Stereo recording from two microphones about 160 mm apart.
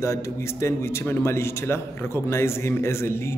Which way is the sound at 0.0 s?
15° left (ahead or behind).